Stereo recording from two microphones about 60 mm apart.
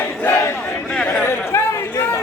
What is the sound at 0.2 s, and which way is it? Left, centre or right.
Battle cry, left.